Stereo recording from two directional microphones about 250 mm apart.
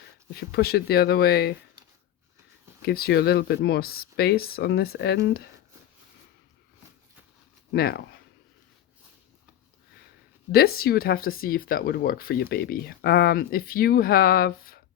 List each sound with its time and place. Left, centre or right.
0.3 s speech: left
2.8 s speech: left
7.7 s speech: left
10.5 s speech: left